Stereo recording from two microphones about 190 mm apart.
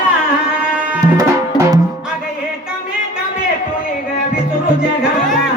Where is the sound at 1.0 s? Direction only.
20° right (ahead or behind).